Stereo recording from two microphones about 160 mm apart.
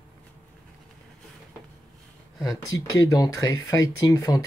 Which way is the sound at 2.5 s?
20° left (ahead or behind).